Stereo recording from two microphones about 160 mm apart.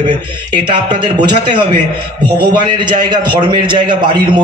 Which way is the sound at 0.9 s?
25° right (ahead or behind).